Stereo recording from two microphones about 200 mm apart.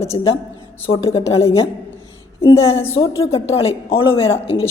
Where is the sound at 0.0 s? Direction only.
30° left (ahead or behind).